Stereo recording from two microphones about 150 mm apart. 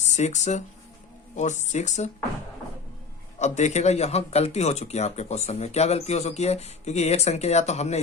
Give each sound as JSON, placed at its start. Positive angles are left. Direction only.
{"t": 0.0, "sound": "speech", "side_deg": 50}
{"t": 3.3, "sound": "speech", "side_deg": 50}